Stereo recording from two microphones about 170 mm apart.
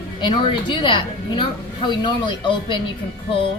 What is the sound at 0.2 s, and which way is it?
A woman's voice, 30° left (ahead or behind).